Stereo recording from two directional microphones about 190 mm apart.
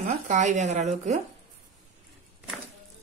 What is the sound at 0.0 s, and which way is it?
Speech, 40° right (ahead or behind).